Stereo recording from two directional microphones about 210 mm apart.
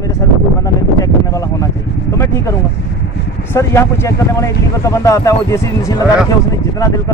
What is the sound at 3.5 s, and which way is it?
Speech, 10° left (ahead or behind).